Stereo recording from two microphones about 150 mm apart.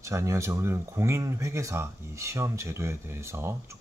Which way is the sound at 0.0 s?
20° right (ahead or behind).